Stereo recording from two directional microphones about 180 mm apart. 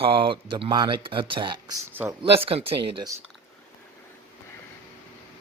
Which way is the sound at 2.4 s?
30° right (ahead or behind).